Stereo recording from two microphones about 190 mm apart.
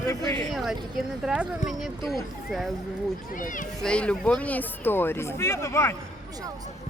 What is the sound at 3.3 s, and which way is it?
Speech, 45° left (ahead or behind).